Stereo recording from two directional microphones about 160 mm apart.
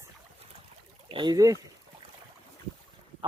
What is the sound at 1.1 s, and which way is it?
Speech, 30° right (ahead or behind).